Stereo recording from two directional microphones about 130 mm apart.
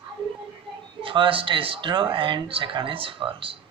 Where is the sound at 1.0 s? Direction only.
40° right (ahead or behind).